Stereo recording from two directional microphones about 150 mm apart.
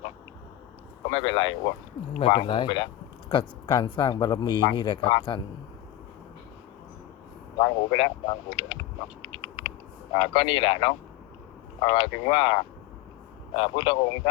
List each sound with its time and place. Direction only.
1.1 s speech: 35° left (ahead or behind)
7.6 s speech: 35° left (ahead or behind)
9.2 s a sound: 30° left (ahead or behind)
10.2 s speech: 35° left (ahead or behind)